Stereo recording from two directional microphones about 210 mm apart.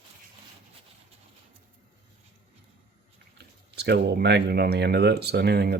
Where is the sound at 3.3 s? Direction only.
55° right (ahead or behind).